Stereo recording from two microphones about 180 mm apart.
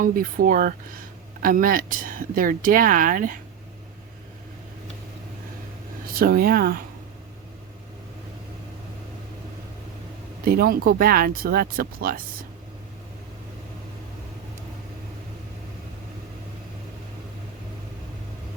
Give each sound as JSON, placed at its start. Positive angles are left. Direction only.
{"t": 0.0, "sound": "speech", "side_deg": -50}
{"t": 6.1, "sound": "speech", "side_deg": -55}
{"t": 10.4, "sound": "speech", "side_deg": -55}